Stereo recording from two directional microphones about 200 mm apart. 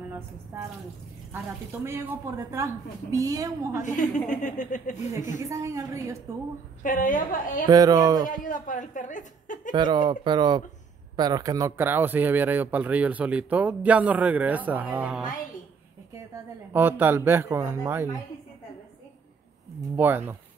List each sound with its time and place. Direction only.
0.5 s speech: 10° right (ahead or behind)
3.8 s a woman's voice: 40° left (ahead or behind)
5.4 s speech: 15° right (ahead or behind)
6.8 s a woman's voice: 40° left (ahead or behind)
7.6 s speech: 20° right (ahead or behind)
8.3 s a woman's voice: 40° left (ahead or behind)
9.7 s speech: 25° right (ahead or behind); by 15.3 s 5° right (ahead or behind)
16.7 s speech: 10° right (ahead or behind)
20.0 s speech: 10° right (ahead or behind)